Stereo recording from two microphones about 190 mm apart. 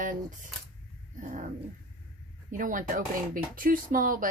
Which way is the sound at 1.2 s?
40° right (ahead or behind).